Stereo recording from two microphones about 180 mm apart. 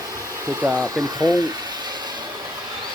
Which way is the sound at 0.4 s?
15° right (ahead or behind).